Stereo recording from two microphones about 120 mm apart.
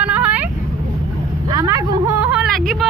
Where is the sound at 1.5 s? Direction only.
25° right (ahead or behind).